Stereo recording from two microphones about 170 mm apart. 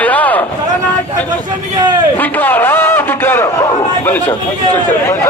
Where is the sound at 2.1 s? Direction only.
10° left (ahead or behind).